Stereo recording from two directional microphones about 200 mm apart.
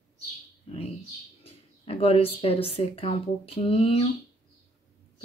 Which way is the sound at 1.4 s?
30° left (ahead or behind).